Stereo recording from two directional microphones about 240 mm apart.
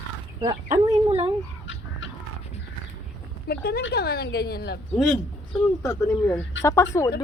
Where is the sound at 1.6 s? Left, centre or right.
Left.